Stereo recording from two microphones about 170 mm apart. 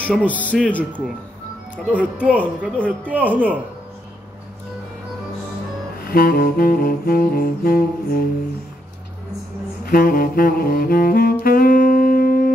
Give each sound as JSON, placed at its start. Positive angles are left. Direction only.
{"t": 0.1, "sound": "speech", "side_deg": 10}
{"t": 1.9, "sound": "speech", "side_deg": -10}
{"t": 2.7, "sound": "speech", "side_deg": 10}
{"t": 3.1, "sound": "speech", "side_deg": -10}
{"t": 6.0, "sound": "saxophone", "side_deg": 60}
{"t": 9.8, "sound": "saxophone", "side_deg": 55}